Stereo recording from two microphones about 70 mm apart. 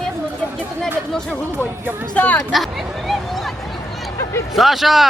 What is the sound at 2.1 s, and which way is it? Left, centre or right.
Speech, centre.